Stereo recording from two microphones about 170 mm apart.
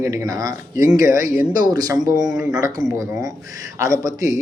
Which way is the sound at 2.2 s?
5° right (ahead or behind).